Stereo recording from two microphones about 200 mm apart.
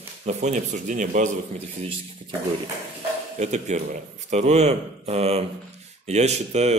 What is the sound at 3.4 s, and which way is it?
A man's voice, 35° right (ahead or behind).